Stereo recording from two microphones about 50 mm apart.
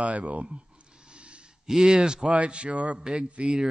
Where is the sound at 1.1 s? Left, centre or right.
Right.